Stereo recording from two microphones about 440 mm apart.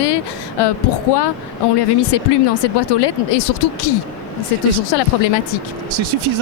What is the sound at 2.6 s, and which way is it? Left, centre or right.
Speech, left.